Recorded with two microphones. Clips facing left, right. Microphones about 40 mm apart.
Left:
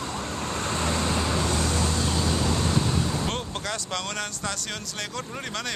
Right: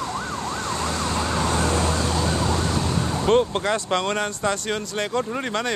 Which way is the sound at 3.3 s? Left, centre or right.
Right.